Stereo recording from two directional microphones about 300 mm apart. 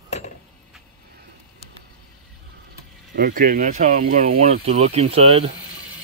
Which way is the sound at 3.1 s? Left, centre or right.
Right.